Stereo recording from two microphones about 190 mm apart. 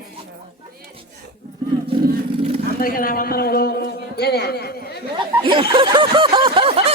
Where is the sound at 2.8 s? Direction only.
50° left (ahead or behind).